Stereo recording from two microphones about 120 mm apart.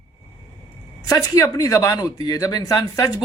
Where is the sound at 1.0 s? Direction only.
30° left (ahead or behind).